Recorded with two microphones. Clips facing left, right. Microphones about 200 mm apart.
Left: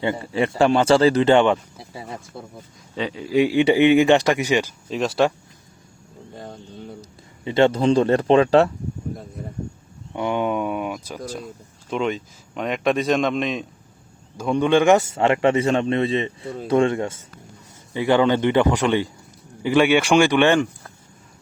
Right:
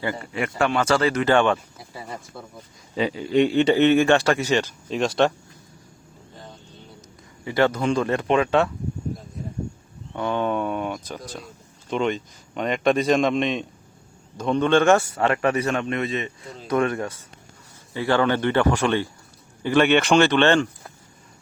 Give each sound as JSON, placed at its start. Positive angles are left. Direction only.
{"t": 0.0, "sound": "speech", "side_deg": 25}
{"t": 2.9, "sound": "a man's voice", "side_deg": -5}
{"t": 7.4, "sound": "speech", "side_deg": 25}
{"t": 10.2, "sound": "a sound", "side_deg": 15}
{"t": 11.9, "sound": "a man's voice", "side_deg": 0}